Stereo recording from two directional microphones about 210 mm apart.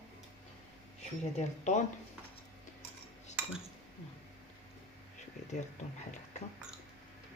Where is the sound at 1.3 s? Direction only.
35° left (ahead or behind).